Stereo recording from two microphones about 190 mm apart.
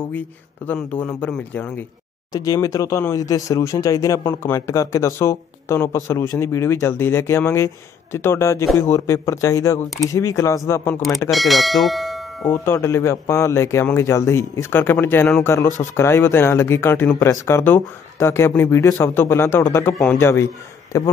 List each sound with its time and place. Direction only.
0.7 s speech: 10° left (ahead or behind)
2.3 s speech: 20° left (ahead or behind)
11.0 s speech: centre (ahead or behind)
12.6 s speech: 15° left (ahead or behind)